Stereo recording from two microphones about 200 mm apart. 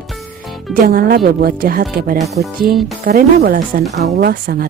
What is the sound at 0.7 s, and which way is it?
Speech, 45° right (ahead or behind).